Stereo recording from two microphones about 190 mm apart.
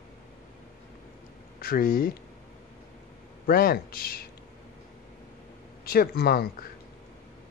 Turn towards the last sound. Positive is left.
turn(degrees=55)  # may be behind; listen again after turning